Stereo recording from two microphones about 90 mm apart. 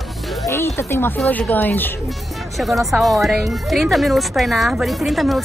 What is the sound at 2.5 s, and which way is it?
Speech, centre (ahead or behind).